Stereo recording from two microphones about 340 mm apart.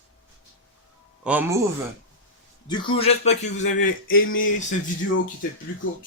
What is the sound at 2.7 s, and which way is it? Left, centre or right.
Speech, centre.